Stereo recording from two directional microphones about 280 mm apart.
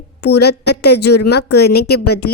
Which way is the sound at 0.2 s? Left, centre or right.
Left.